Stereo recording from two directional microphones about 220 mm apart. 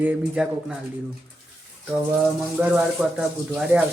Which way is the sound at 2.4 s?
5° right (ahead or behind).